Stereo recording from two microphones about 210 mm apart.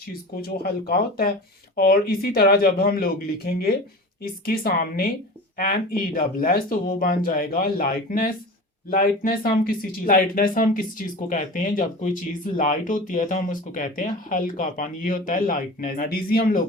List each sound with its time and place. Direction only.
0.1 s speech: 45° left (ahead or behind)